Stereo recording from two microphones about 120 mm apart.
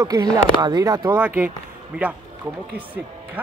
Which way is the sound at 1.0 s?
15° right (ahead or behind).